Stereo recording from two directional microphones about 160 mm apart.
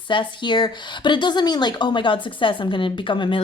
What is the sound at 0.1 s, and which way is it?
Speech, 30° left (ahead or behind).